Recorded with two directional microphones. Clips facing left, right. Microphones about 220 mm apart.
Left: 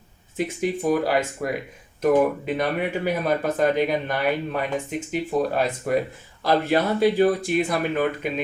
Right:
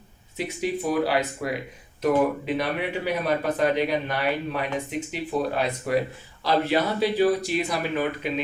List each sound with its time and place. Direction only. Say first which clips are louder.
0.3 s speech: left 3 dB; 50° left (ahead or behind)
2.6 s speech: left 3 dB; 50° left (ahead or behind)